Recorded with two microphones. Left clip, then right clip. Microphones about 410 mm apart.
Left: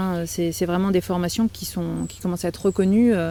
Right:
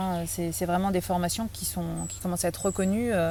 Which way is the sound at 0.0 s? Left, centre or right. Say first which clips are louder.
Left 6 dB; centre.